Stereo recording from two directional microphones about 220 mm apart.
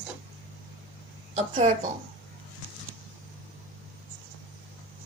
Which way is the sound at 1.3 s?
30° right (ahead or behind).